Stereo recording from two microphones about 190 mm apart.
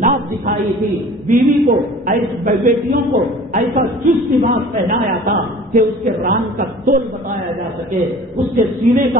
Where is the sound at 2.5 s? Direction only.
40° right (ahead or behind).